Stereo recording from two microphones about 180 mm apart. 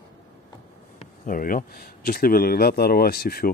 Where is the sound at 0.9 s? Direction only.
45° left (ahead or behind).